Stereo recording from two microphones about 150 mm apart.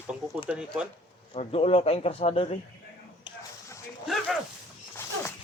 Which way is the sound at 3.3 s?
35° left (ahead or behind).